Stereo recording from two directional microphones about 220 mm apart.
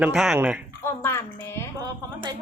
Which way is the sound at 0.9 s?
10° left (ahead or behind).